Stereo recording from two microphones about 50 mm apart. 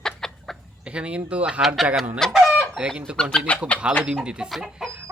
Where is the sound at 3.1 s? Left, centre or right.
Centre.